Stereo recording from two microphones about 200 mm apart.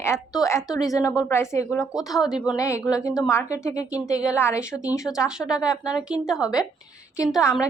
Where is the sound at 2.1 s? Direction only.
Centre (ahead or behind).